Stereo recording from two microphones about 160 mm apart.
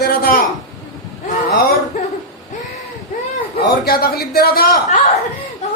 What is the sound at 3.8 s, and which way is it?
A man's voice, 75° left (ahead or behind).